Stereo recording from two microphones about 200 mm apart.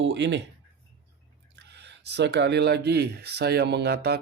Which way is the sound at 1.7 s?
60° right (ahead or behind).